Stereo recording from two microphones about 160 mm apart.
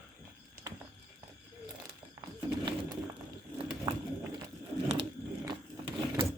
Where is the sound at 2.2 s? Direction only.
15° right (ahead or behind).